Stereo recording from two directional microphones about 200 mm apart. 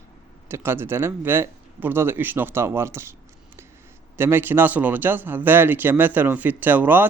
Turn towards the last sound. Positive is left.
turn(degrees=-10)  # may be behind; listen again after turning